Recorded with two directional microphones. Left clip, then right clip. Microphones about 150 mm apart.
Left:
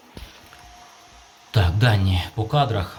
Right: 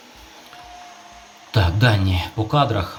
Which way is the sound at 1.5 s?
Centre (ahead or behind).